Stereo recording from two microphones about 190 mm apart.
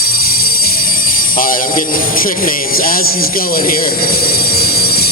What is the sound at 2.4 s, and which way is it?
Speech, 50° left (ahead or behind).